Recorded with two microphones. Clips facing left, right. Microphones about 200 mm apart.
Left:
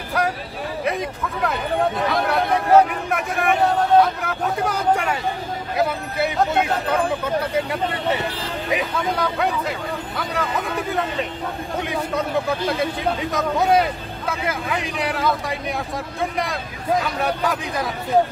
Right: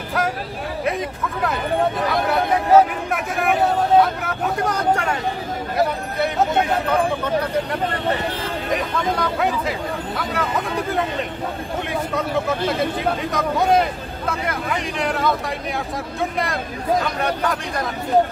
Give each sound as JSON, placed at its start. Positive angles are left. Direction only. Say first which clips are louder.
{"t": 0.2, "sound": "a sound", "louder": "left 1 dB", "side_deg": 0}
{"t": 0.8, "sound": "speech", "louder": "right 1 dB", "side_deg": 0}
{"t": 6.3, "sound": "speech", "louder": "right 1 dB", "side_deg": 10}
{"t": 11.8, "sound": "speech", "louder": "even", "side_deg": 0}